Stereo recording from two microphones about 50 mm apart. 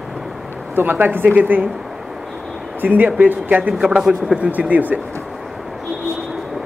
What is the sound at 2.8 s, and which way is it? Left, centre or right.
Speech, right.